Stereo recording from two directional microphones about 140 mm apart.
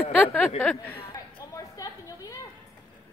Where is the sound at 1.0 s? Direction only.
30° left (ahead or behind).